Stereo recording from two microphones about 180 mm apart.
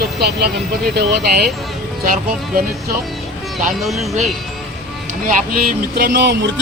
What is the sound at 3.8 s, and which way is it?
Speech, centre (ahead or behind).